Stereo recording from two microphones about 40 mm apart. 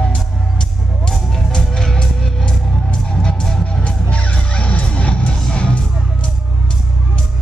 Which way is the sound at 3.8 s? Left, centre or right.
Left.